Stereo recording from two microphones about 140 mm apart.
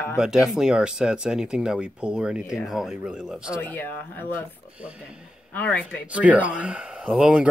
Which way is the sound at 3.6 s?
15° left (ahead or behind).